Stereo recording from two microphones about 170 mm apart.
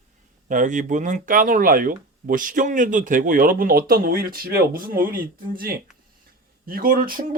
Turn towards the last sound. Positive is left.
turn(degrees=-55)  # may be behind; listen again after turning